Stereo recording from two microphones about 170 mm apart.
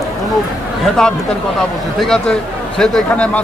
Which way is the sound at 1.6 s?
Centre (ahead or behind).